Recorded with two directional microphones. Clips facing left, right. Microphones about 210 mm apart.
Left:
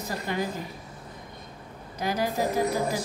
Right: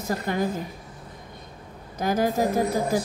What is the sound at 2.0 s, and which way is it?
Speech, 50° right (ahead or behind).